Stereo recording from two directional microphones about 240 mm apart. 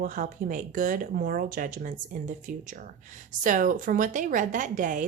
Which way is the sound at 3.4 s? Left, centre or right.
Right.